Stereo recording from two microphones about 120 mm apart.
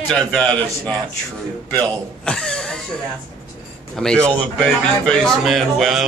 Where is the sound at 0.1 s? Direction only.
5° left (ahead or behind).